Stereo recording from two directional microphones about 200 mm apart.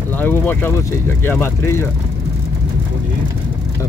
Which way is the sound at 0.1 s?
10° left (ahead or behind).